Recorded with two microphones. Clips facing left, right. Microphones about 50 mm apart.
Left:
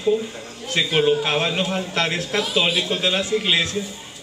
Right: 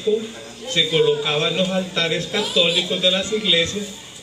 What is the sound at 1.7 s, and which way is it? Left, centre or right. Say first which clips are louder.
Speech: right 1 dB; left.